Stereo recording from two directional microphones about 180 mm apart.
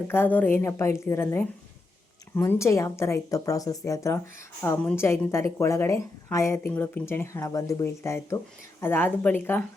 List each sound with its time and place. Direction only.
0.1 s speech: 10° left (ahead or behind)